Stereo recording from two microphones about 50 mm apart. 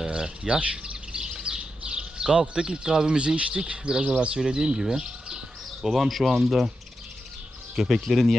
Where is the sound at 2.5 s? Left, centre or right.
Centre.